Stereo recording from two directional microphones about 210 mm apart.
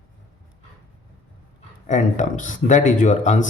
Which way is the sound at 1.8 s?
35° left (ahead or behind).